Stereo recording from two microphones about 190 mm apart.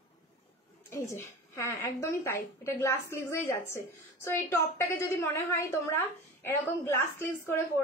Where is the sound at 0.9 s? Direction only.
15° left (ahead or behind).